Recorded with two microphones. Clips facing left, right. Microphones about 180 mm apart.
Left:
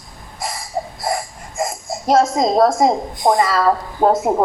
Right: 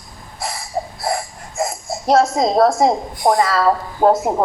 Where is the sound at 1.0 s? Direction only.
Centre (ahead or behind).